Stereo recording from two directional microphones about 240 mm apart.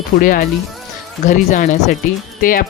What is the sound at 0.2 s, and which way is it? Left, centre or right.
Speech, left.